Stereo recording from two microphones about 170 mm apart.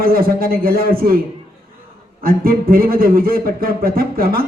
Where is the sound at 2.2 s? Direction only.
60° right (ahead or behind).